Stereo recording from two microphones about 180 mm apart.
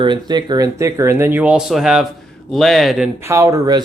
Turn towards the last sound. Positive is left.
turn(degrees=-20)  # may be behind; listen again after turning